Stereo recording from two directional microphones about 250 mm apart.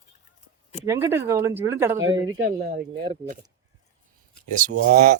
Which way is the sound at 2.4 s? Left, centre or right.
Right.